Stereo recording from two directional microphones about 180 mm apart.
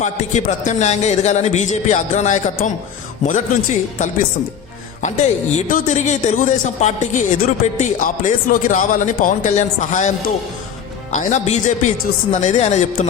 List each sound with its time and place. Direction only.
0.0 s a man's voice: 40° left (ahead or behind)